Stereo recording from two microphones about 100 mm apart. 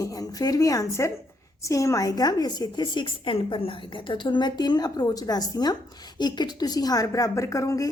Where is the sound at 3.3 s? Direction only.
65° left (ahead or behind).